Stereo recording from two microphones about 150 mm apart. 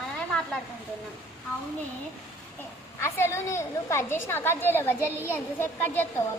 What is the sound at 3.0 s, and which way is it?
A woman's voice, 15° left (ahead or behind).